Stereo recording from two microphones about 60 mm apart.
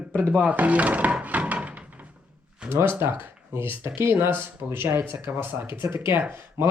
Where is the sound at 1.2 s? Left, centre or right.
Right.